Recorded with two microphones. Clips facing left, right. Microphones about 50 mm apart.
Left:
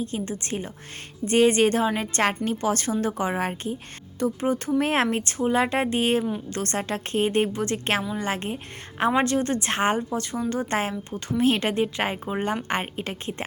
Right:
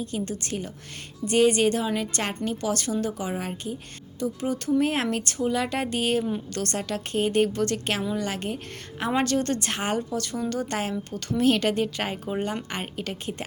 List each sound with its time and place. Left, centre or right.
0.0 s a woman's voice: left
4.8 s speech: left
5.1 s speech: left
7.5 s a woman's voice: left
9.6 s a woman's voice: left